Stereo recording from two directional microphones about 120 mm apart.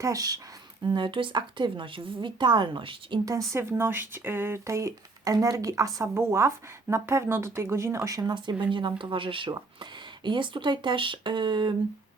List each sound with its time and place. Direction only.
0.0 s speech: 30° right (ahead or behind)
0.9 s a woman's voice: 40° right (ahead or behind)
3.2 s speech: 25° right (ahead or behind)